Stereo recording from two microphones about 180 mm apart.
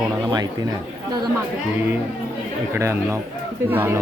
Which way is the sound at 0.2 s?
25° right (ahead or behind).